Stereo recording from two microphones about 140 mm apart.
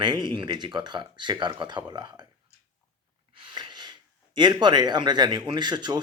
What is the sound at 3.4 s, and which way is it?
Speech, 35° right (ahead or behind).